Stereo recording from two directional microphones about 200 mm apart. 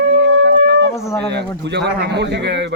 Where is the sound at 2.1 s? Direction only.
60° right (ahead or behind).